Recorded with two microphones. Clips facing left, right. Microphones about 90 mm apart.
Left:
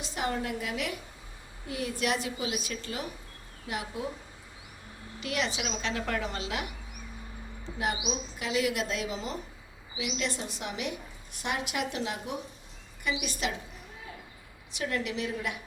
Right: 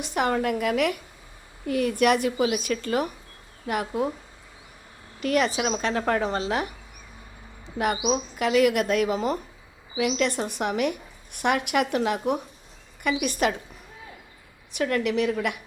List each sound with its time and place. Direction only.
0.0 s a woman's voice: 60° right (ahead or behind)
5.2 s a woman's voice: 50° right (ahead or behind)
7.8 s a woman's voice: 65° right (ahead or behind)
14.7 s a woman's voice: 60° right (ahead or behind)